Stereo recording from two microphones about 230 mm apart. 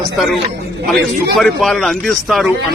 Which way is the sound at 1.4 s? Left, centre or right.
Centre.